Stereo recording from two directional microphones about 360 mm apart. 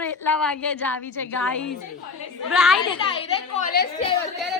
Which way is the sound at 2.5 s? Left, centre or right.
Centre.